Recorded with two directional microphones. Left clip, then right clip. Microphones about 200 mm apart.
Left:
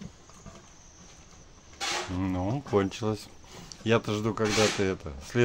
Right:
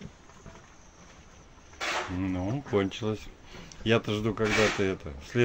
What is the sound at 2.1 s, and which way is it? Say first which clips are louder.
Speech: left 1 dB; 20° left (ahead or behind).